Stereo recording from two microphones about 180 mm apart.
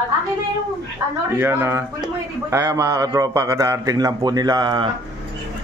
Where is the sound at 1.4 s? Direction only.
15° right (ahead or behind).